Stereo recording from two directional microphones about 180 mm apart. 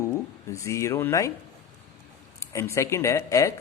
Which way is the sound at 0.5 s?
15° left (ahead or behind).